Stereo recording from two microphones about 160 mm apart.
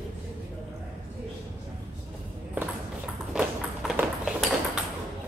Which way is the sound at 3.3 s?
5° right (ahead or behind).